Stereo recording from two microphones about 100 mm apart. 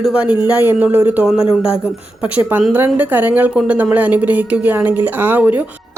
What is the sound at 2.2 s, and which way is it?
A woman's voice, 15° right (ahead or behind).